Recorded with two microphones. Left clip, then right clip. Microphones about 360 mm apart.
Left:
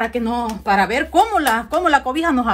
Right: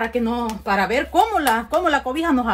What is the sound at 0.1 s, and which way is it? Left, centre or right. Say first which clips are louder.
A woman's voice: left 1 dB; left.